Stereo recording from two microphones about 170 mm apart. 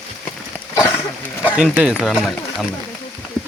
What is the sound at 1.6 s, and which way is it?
Speech, 5° right (ahead or behind).